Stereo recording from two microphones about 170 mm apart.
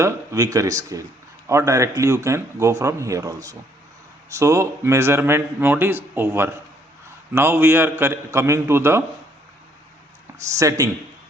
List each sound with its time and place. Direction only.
0.0 s a man's voice: 20° right (ahead or behind)
10.6 s a man's voice: 20° right (ahead or behind)